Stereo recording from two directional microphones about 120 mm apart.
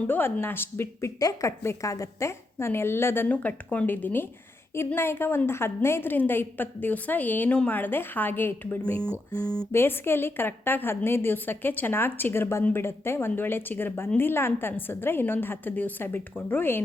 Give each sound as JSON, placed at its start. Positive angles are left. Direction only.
{"t": 0.1, "sound": "a woman's voice", "side_deg": 15}